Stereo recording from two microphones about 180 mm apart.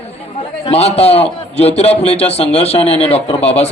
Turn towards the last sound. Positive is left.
turn(degrees=35)  # may be behind; listen again after turning